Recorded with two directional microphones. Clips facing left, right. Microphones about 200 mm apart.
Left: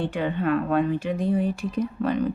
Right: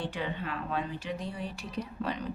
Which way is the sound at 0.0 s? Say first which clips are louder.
Left 10 dB; 55° left (ahead or behind).